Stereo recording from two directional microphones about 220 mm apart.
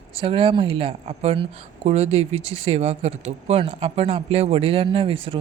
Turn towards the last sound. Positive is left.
turn(degrees=-25)  # may be behind; listen again after turning